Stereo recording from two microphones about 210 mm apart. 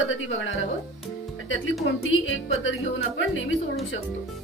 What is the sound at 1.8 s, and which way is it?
Speech, 65° left (ahead or behind).